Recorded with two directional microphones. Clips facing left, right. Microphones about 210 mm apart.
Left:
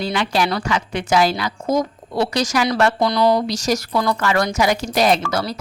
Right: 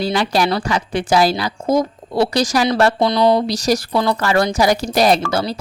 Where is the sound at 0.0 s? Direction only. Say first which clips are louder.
Right 3 dB; 35° right (ahead or behind).